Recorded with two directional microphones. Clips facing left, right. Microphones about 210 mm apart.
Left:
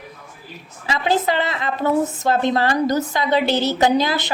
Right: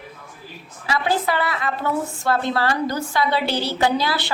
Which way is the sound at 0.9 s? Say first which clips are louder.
Left 2 dB; 20° left (ahead or behind).